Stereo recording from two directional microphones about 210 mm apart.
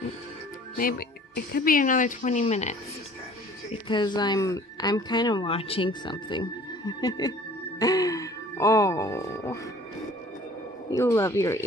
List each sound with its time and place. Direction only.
0.7 s speech: 45° left (ahead or behind)
3.8 s speech: 20° left (ahead or behind)
10.9 s speech: 15° left (ahead or behind)